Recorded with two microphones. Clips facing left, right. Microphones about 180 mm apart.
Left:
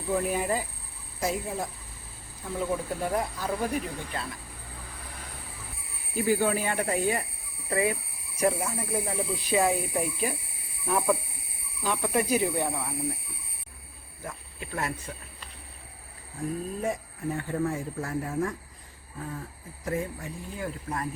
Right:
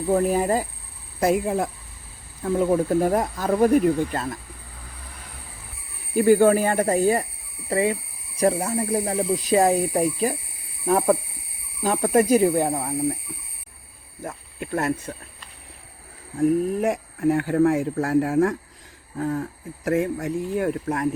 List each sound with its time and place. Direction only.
0.1 s speech: 40° right (ahead or behind)
1.2 s speech: 65° right (ahead or behind)
2.4 s speech: 55° right (ahead or behind)
6.1 s speech: 55° right (ahead or behind); by 7.3 s 35° right (ahead or behind)
7.7 s speech: 25° right (ahead or behind)
14.3 s speech: 50° right (ahead or behind)
16.4 s speech: 75° right (ahead or behind)
19.1 s speech: 70° right (ahead or behind)